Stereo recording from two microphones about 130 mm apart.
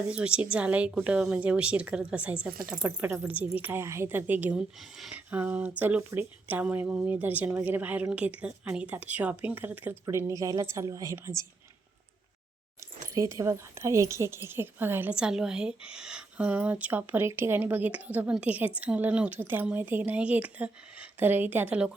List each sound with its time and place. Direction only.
0.1 s a woman's voice: 10° right (ahead or behind)
4.8 s a woman's voice: centre (ahead or behind); by 11.4 s 25° right (ahead or behind)
13.1 s a woman's voice: 25° right (ahead or behind)